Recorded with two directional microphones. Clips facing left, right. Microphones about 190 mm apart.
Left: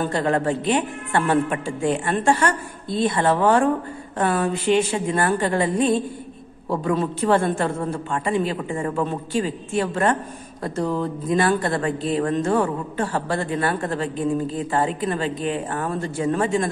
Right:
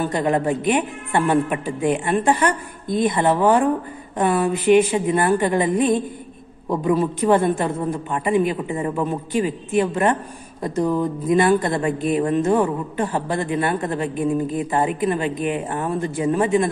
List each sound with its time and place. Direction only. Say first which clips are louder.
0.0 s speech: right 1 dB; 15° right (ahead or behind)